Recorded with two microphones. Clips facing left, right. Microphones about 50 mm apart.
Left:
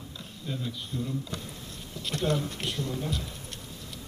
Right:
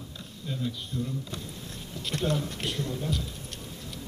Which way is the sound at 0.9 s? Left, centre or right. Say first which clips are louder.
Even; left.